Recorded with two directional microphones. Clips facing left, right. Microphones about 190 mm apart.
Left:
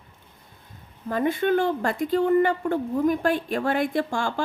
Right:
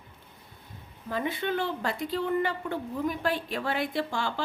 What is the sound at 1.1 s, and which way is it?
A woman's voice, 50° left (ahead or behind).